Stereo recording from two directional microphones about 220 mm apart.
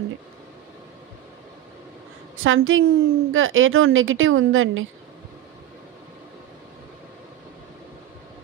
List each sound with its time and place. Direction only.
2.3 s a woman's voice: 65° right (ahead or behind)